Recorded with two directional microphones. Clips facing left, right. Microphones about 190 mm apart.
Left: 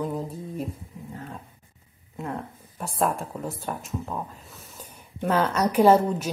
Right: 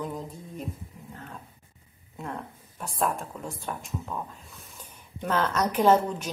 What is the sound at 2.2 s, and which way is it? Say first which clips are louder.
A woman's voice: left 4 dB; 5° left (ahead or behind).